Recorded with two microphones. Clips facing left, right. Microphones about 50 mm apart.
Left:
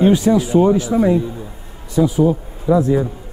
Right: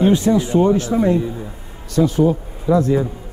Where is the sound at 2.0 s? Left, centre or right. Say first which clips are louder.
Left 1 dB; centre.